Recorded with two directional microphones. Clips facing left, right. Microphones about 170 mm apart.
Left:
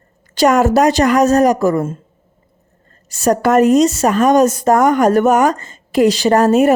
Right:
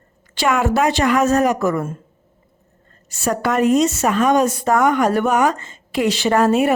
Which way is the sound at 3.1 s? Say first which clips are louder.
Left 7 dB; 40° left (ahead or behind).